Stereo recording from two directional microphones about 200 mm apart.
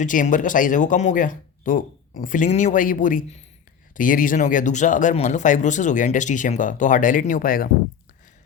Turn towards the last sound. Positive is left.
turn(degrees=45)  # may be behind; listen again after turning